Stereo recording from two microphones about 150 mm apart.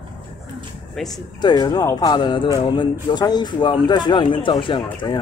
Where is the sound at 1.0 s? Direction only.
Centre (ahead or behind).